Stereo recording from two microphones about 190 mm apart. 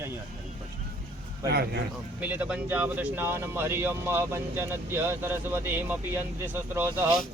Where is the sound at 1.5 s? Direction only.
55° right (ahead or behind).